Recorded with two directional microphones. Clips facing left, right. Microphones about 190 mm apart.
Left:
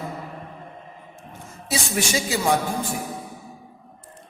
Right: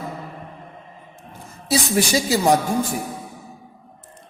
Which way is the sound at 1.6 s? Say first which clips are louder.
Right 6 dB; 35° right (ahead or behind).